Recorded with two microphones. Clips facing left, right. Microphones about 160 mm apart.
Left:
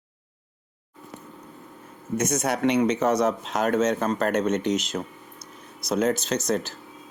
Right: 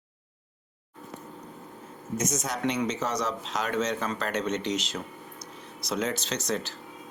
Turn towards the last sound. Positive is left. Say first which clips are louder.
# left 5 dB
turn(degrees=50)  # may be behind; listen again after turning